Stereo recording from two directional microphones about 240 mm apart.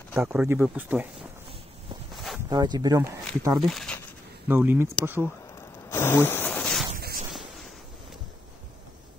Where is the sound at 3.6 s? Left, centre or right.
Centre.